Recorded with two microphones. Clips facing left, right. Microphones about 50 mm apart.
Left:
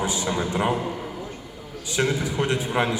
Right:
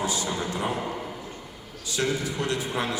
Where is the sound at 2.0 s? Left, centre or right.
Left.